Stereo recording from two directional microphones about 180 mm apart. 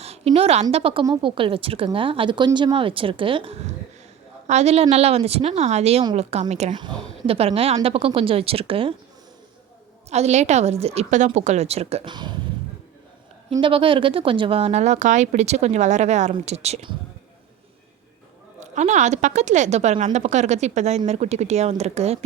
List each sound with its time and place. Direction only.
0.3 s a woman's voice: 35° right (ahead or behind)
10.1 s speech: 35° right (ahead or behind)
13.6 s speech: 30° right (ahead or behind)
18.6 s speech: 40° right (ahead or behind)